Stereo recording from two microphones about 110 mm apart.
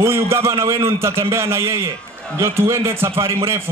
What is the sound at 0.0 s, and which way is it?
A man's voice, 25° right (ahead or behind).